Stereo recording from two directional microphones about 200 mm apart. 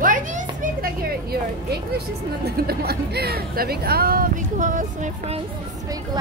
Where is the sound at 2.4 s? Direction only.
50° right (ahead or behind).